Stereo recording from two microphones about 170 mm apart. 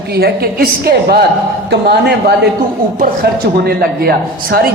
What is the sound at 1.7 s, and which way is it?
A woman's voice, 75° right (ahead or behind).